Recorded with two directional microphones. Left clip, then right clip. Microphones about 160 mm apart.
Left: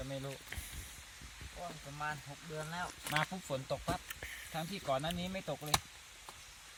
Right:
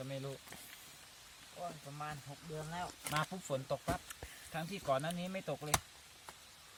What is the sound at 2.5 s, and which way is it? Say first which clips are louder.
Speech: left 2 dB; 35° right (ahead or behind).